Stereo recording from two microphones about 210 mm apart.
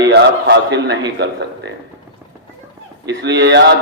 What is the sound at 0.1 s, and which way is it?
A man's voice, 55° right (ahead or behind).